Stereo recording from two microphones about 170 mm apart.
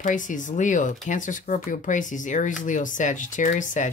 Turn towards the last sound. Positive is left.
turn(degrees=50)  # may be behind; listen again after turning